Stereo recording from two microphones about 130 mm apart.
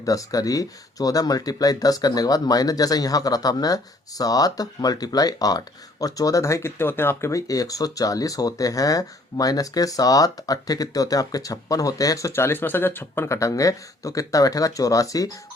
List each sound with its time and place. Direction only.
0.0 s speech: 25° left (ahead or behind)